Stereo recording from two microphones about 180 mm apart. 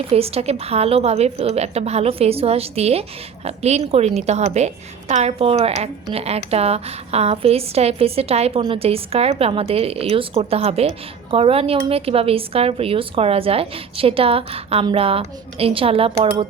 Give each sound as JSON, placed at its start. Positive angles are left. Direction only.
{"t": 0.1, "sound": "a woman's voice", "side_deg": -35}